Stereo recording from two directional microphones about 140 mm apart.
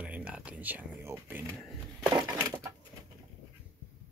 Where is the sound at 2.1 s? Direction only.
25° right (ahead or behind).